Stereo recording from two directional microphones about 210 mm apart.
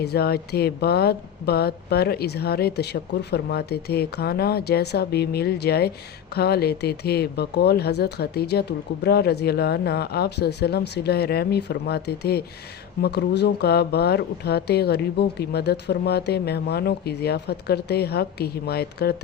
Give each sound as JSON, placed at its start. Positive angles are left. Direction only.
{"t": 0.0, "sound": "speech", "side_deg": 50}